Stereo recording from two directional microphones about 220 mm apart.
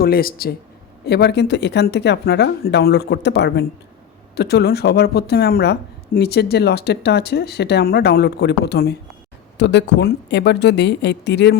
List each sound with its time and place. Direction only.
0.0 s speech: 40° left (ahead or behind)